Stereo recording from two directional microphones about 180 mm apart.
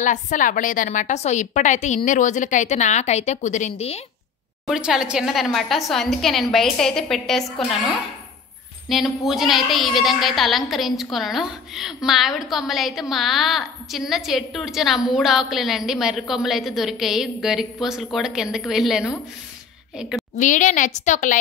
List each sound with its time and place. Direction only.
0.0 s a woman's voice: 45° left (ahead or behind)
4.6 s a woman's voice: 5° right (ahead or behind)
8.8 s a woman's voice: centre (ahead or behind)
20.3 s a woman's voice: 45° left (ahead or behind)